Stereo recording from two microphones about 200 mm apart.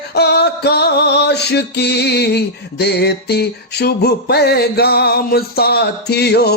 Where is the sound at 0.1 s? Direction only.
55° left (ahead or behind).